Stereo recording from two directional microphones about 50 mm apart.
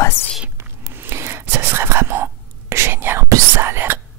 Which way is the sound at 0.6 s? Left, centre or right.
Right.